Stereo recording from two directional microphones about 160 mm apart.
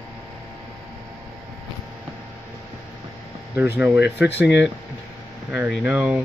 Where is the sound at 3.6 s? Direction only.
10° right (ahead or behind).